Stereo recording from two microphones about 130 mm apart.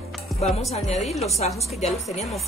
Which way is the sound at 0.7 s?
60° left (ahead or behind).